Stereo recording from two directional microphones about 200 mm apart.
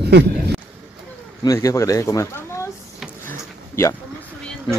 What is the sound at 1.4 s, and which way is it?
Speech, 15° left (ahead or behind).